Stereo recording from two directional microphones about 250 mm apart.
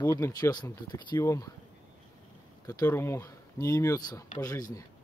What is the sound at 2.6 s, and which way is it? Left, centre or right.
Speech, centre.